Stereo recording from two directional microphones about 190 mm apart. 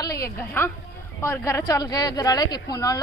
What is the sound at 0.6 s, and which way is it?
Speech, 10° left (ahead or behind).